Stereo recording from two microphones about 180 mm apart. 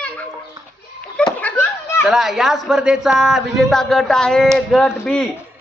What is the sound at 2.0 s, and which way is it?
A man's voice, centre (ahead or behind).